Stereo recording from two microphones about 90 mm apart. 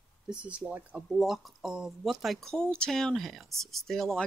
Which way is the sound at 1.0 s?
Centre (ahead or behind).